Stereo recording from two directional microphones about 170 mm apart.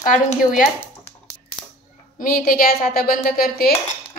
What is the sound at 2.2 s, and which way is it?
A woman's voice, 55° left (ahead or behind).